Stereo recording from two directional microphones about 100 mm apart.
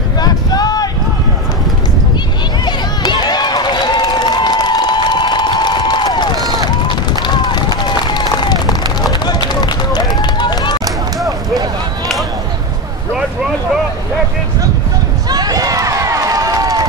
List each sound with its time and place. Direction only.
0.2 s a sound: 40° left (ahead or behind)
2.6 s run: 45° left (ahead or behind)
15.2 s run: 40° right (ahead or behind)